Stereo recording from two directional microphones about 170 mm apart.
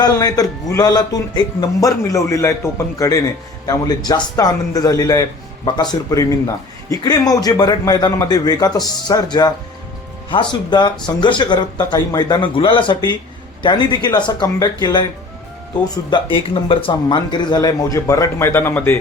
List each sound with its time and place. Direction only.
0.0 s speech: 20° left (ahead or behind)
16.0 s speech: 25° left (ahead or behind)